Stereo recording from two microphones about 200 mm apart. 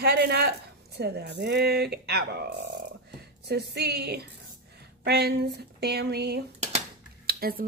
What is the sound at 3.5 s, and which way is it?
A woman's voice, 55° right (ahead or behind).